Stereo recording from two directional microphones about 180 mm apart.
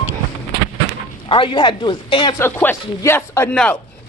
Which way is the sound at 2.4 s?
10° left (ahead or behind).